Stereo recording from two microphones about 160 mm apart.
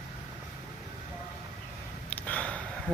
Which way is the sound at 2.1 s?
10° left (ahead or behind).